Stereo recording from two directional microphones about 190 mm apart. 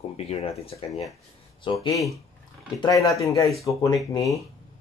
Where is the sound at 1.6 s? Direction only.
20° left (ahead or behind).